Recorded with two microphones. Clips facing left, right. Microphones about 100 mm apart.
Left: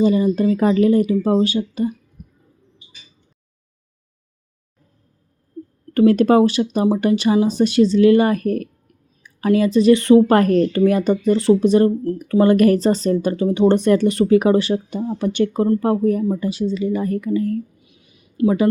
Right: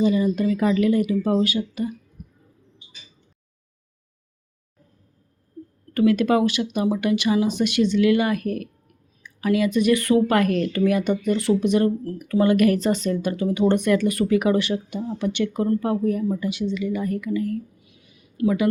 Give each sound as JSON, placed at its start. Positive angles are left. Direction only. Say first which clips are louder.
{"t": 0.0, "sound": "speech", "louder": "left 4 dB", "side_deg": 35}
{"t": 5.9, "sound": "speech", "louder": "left 5 dB", "side_deg": 35}
{"t": 17.8, "sound": "a sound", "louder": "left 1 dB", "side_deg": 20}